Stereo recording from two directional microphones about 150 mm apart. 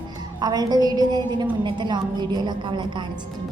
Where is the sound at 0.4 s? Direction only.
25° right (ahead or behind).